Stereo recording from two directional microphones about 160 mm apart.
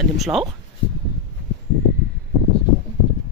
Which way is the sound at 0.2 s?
Centre (ahead or behind).